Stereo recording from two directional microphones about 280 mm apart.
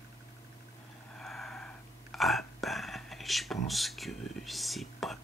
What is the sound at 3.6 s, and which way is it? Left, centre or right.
Speech, centre.